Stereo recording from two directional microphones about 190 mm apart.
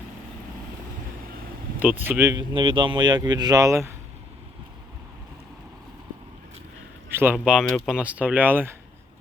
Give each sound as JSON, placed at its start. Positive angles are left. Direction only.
{"t": 1.8, "sound": "speech", "side_deg": -10}
{"t": 2.6, "sound": "speech", "side_deg": -25}
{"t": 7.1, "sound": "speech", "side_deg": -10}